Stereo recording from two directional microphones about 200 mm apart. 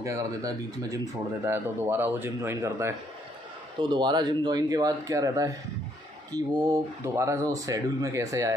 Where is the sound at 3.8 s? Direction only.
25° right (ahead or behind).